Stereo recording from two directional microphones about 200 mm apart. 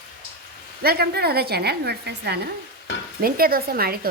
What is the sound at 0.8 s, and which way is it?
Speech, 50° right (ahead or behind).